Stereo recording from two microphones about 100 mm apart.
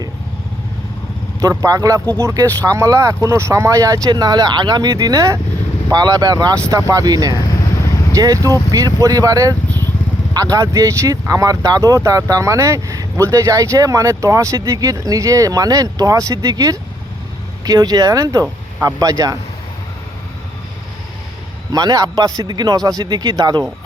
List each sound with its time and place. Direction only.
1.4 s speech: 35° right (ahead or behind)
9.6 s vehicle: 20° left (ahead or behind)
10.3 s speech: 35° right (ahead or behind)
21.7 s speech: 40° right (ahead or behind)